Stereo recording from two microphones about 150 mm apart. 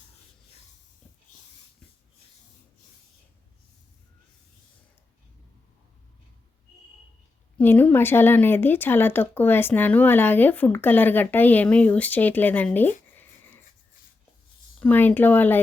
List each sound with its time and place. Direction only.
7.6 s speech: 15° left (ahead or behind)
14.8 s speech: 10° left (ahead or behind)